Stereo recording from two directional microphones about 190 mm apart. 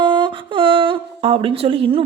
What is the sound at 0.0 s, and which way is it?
A woman's voice, 25° right (ahead or behind).